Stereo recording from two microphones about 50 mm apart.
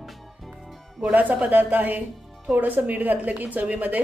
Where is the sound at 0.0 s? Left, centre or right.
Centre.